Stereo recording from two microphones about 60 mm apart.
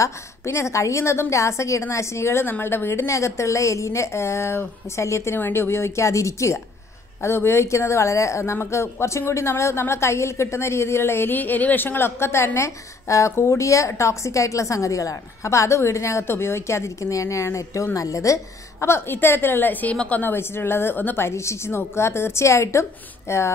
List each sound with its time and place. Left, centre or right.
0.0 s a woman's voice: left
3.1 s a woman's voice: left
5.4 s speech: left
7.2 s speech: left
11.3 s a woman's voice: left
12.5 s a woman's voice: left
16.3 s speech: left
17.9 s a woman's voice: left
20.3 s a woman's voice: left
21.3 s speech: left